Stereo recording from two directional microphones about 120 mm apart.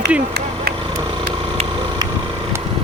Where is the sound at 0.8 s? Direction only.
40° right (ahead or behind).